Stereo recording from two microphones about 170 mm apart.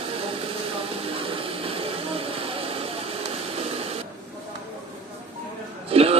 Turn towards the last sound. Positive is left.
turn(degrees=-35)  # may be behind; listen again after turning